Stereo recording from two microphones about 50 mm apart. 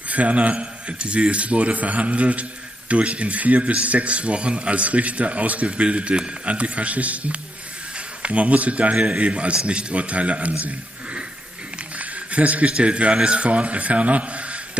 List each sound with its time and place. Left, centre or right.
0.1 s a man's voice: right
12.0 s speech: right